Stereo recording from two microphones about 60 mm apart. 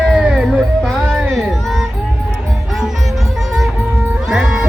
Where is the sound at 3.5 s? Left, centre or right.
Centre.